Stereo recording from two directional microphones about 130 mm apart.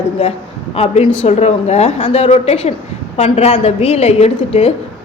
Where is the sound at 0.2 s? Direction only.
50° left (ahead or behind).